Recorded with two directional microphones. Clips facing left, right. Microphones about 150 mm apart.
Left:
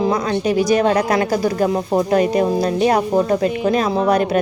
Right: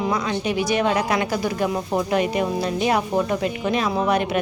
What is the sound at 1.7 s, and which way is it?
A woman's voice, 30° left (ahead or behind).